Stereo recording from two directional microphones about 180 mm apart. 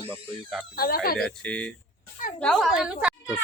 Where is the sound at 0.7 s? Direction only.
55° left (ahead or behind).